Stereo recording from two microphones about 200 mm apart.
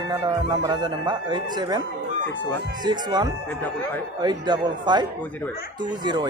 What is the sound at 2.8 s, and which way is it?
Music, 20° right (ahead or behind).